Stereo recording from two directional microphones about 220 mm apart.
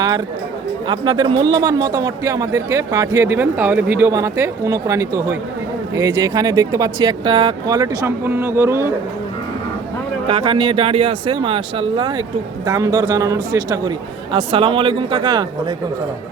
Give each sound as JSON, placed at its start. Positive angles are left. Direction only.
{"t": 0.9, "sound": "a man's voice", "side_deg": -20}
{"t": 10.2, "sound": "a man's voice", "side_deg": -25}